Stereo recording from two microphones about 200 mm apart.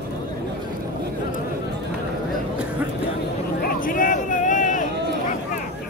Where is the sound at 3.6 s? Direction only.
45° left (ahead or behind).